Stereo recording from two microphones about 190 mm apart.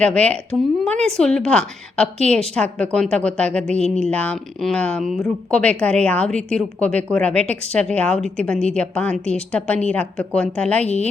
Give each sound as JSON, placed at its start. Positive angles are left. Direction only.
{"t": 0.0, "sound": "speech", "side_deg": 5}